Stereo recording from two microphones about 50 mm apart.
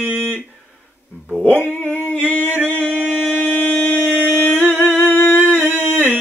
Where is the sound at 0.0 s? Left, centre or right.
Right.